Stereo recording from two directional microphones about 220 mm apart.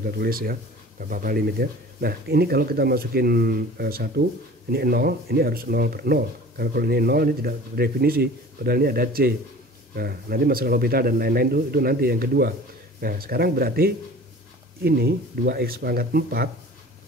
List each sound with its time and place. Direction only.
0.0 s speech: 45° right (ahead or behind)